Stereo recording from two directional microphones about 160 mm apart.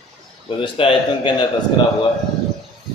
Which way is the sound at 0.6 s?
30° left (ahead or behind).